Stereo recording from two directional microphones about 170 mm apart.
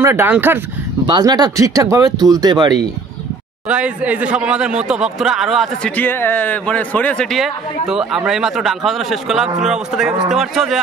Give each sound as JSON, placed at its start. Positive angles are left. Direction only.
{"t": 0.0, "sound": "speech", "side_deg": -15}
{"t": 1.0, "sound": "speech", "side_deg": -25}
{"t": 3.6, "sound": "speech", "side_deg": -5}